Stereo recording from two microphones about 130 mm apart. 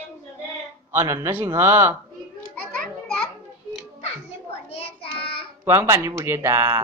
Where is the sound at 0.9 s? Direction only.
25° right (ahead or behind).